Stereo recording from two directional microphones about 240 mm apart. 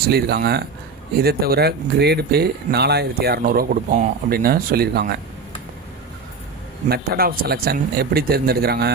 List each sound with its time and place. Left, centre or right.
0.1 s speech: right
6.8 s speech: right